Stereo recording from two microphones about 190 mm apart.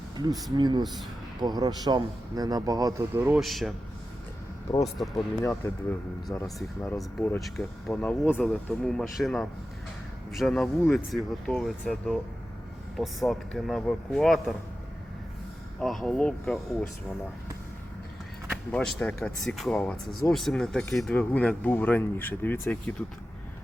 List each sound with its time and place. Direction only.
0.2 s a man's voice: 20° right (ahead or behind)
3.4 s speech: centre (ahead or behind)
4.8 s speech: centre (ahead or behind)
7.0 s speech: 5° left (ahead or behind)
15.8 s speech: centre (ahead or behind)
18.7 s speech: 5° left (ahead or behind)